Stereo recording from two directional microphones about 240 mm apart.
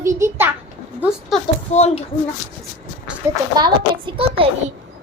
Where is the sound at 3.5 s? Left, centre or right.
Centre.